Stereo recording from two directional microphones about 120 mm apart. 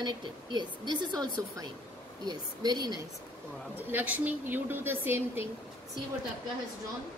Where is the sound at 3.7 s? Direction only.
15° right (ahead or behind).